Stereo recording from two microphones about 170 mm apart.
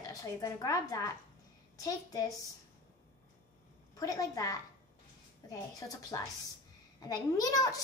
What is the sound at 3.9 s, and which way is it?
A woman's voice, 20° left (ahead or behind).